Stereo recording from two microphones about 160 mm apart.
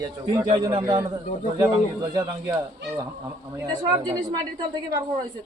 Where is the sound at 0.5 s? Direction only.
30° right (ahead or behind).